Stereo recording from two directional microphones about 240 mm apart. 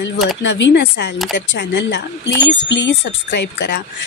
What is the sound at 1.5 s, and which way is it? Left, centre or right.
A woman's voice, left.